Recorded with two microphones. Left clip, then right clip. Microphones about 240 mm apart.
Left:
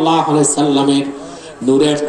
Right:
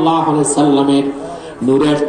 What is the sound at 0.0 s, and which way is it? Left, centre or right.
A man's voice, left.